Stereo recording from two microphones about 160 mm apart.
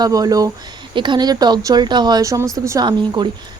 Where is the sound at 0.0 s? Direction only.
20° right (ahead or behind).